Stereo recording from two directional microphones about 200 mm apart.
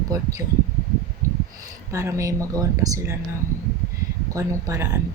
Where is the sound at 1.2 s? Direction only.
15° right (ahead or behind).